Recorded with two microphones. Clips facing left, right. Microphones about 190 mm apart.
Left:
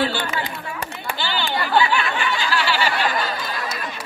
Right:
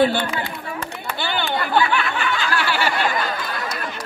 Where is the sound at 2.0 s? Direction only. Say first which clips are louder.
Even; 10° left (ahead or behind).